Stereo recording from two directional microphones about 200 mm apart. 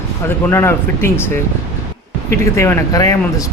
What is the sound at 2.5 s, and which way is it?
Speech, 15° left (ahead or behind).